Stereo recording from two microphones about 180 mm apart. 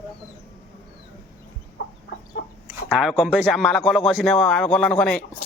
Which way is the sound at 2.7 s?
Centre (ahead or behind).